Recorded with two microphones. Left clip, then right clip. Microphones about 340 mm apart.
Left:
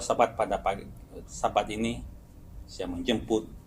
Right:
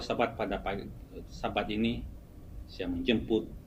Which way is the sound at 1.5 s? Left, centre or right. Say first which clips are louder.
Left 2 dB; centre.